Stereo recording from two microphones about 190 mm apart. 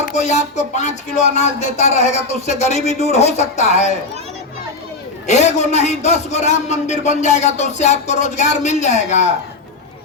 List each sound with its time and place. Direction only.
0.1 s a man's voice: 40° left (ahead or behind)
5.2 s a man's voice: 35° left (ahead or behind)